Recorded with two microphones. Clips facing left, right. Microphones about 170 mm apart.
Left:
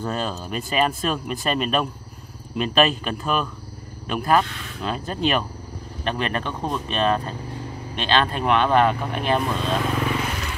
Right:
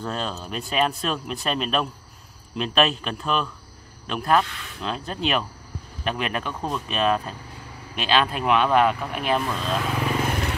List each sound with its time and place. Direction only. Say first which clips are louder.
0.0 s speech: left 3 dB; 5° left (ahead or behind)
10.2 s vehicle: right 3 dB; 50° right (ahead or behind)